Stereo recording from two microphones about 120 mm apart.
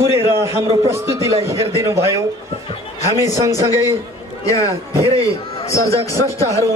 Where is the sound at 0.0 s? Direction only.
20° right (ahead or behind).